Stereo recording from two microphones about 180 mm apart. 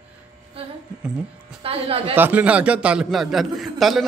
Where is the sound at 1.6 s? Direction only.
30° right (ahead or behind).